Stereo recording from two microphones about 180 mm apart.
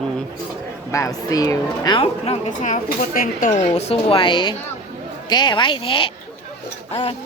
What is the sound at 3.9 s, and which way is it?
Speech, 30° left (ahead or behind).